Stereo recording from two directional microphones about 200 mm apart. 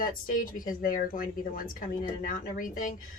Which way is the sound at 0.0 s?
45° left (ahead or behind).